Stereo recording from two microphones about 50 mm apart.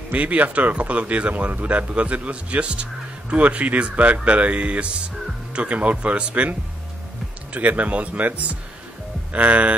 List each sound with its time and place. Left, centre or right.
0.1 s speech: right
7.5 s speech: right